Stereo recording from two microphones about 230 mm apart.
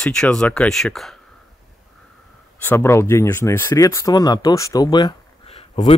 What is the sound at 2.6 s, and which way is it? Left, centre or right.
Speech, centre.